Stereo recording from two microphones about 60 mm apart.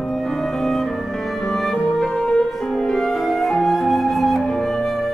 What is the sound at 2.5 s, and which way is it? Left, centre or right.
Flute, centre.